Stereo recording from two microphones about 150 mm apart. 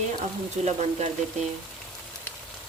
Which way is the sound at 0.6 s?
50° right (ahead or behind).